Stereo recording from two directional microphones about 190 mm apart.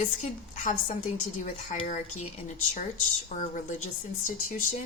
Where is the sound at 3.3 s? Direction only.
40° left (ahead or behind).